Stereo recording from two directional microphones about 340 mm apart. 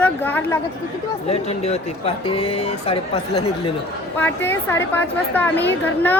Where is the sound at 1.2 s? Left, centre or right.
Centre.